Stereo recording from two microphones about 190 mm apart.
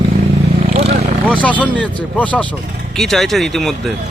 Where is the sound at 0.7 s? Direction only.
35° right (ahead or behind).